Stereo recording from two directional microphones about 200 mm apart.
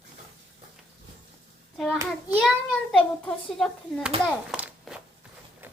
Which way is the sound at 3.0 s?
5° left (ahead or behind).